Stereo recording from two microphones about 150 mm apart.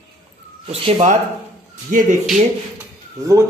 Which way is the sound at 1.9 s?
60° right (ahead or behind).